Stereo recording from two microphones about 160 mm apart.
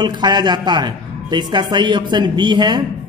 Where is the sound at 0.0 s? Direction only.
25° right (ahead or behind).